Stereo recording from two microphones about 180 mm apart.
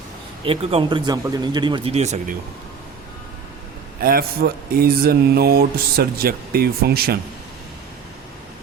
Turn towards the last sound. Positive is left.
turn(degrees=-60)  # may be behind; listen again after turning